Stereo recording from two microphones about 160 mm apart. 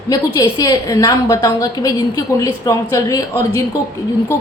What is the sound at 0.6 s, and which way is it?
A woman's voice, 20° left (ahead or behind).